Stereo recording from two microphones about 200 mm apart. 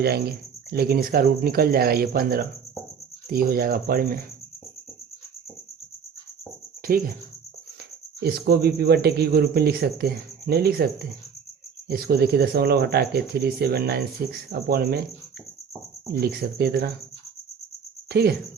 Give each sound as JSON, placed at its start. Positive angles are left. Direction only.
{"t": 0.0, "sound": "speech", "side_deg": -50}
{"t": 6.9, "sound": "speech", "side_deg": -45}
{"t": 8.2, "sound": "speech", "side_deg": -55}
{"t": 11.9, "sound": "speech", "side_deg": -50}
{"t": 16.2, "sound": "speech", "side_deg": -50}
{"t": 18.1, "sound": "speech", "side_deg": -50}